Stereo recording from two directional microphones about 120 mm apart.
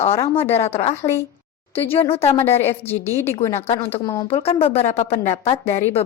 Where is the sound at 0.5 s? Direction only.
60° left (ahead or behind).